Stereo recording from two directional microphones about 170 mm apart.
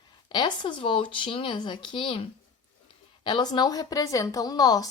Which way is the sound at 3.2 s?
25° left (ahead or behind).